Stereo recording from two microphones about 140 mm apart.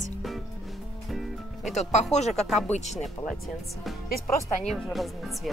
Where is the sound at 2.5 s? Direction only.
Centre (ahead or behind).